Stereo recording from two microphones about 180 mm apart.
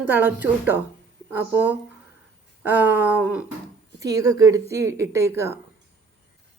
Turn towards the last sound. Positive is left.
turn(degrees=-15)  # may be behind; listen again after turning